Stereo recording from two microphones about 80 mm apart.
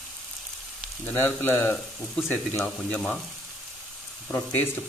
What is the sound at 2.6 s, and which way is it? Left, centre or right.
Speech, centre.